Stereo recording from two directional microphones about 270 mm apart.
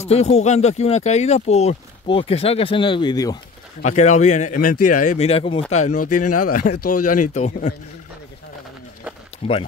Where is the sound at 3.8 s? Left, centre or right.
Left.